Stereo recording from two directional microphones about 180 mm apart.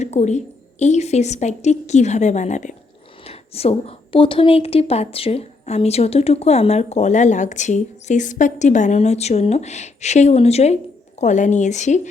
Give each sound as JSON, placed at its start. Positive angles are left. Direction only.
{"t": 0.0, "sound": "a woman's voice", "side_deg": 40}